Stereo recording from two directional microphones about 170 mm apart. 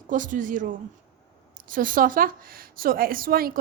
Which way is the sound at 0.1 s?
50° right (ahead or behind).